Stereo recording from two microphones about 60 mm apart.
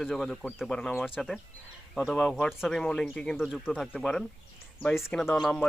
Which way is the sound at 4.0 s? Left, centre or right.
Centre.